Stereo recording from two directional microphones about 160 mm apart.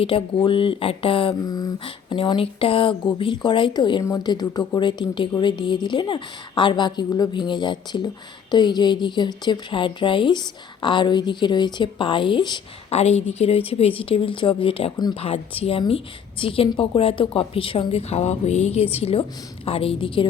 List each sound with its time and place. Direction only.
0.0 s a woman's voice: 35° left (ahead or behind)
12.9 s speech: 40° left (ahead or behind)